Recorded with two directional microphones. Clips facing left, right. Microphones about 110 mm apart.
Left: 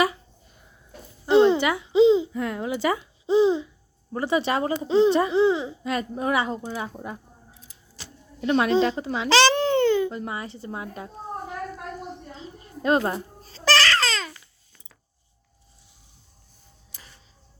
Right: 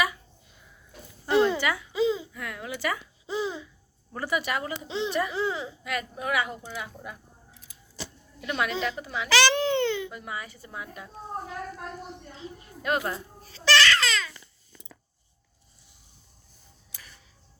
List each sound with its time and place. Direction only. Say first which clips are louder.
0.0 s a sound: left 5 dB; 30° left (ahead or behind)
1.3 s babbling: left 6 dB; 25° left (ahead or behind)
4.1 s speech: left 6 dB; 25° left (ahead or behind)
8.4 s speech: left 9 dB; 30° left (ahead or behind)
9.6 s a child's voice: left 5 dB; 40° left (ahead or behind)
12.1 s a sound: left 2 dB; 30° left (ahead or behind)